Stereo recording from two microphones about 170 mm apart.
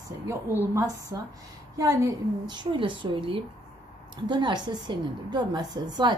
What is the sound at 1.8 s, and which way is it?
A woman's voice, 20° right (ahead or behind).